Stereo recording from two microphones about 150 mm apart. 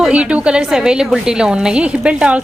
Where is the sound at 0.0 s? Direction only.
5° right (ahead or behind).